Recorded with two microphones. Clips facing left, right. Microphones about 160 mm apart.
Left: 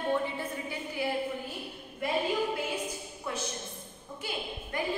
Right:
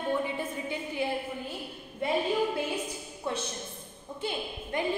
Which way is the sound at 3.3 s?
25° right (ahead or behind).